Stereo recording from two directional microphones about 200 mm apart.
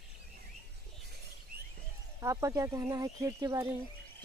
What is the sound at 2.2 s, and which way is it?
Speech, 15° right (ahead or behind).